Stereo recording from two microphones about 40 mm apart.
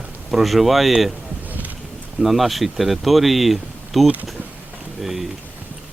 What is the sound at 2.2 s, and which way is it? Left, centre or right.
Speech, centre.